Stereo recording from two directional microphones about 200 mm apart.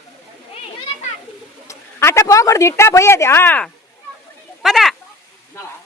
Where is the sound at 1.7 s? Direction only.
15° left (ahead or behind).